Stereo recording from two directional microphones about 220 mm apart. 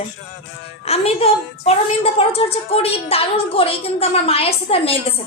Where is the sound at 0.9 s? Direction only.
25° left (ahead or behind).